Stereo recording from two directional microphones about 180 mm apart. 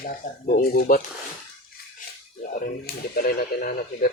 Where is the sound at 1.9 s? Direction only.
45° left (ahead or behind).